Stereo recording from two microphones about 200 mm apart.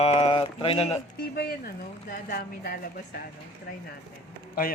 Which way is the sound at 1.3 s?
50° left (ahead or behind).